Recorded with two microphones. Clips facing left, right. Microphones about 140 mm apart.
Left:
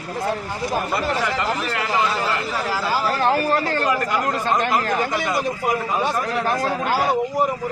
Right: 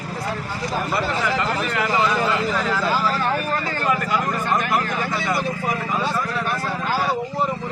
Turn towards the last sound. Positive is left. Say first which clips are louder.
# left 2 dB
turn(degrees=20)  # may be behind; listen again after turning